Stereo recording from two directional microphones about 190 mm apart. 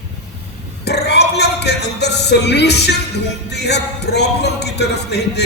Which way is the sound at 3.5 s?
60° left (ahead or behind).